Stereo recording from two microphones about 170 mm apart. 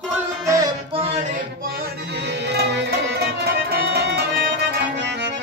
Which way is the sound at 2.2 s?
90° right.